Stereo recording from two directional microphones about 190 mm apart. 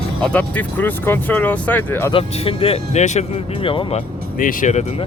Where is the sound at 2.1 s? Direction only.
30° left (ahead or behind).